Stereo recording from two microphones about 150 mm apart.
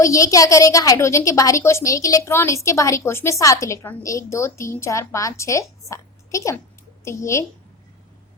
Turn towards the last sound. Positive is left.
turn(degrees=20)  # may be behind; listen again after turning